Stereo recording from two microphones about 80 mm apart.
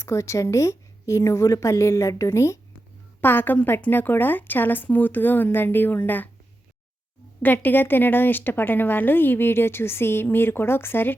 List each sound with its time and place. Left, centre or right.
0.0 s a woman's voice: left
3.2 s a woman's voice: left
7.4 s a woman's voice: left